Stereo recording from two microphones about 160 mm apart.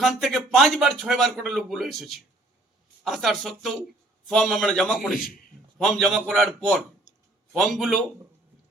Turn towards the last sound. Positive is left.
turn(degrees=0)  # may be behind; listen again after turning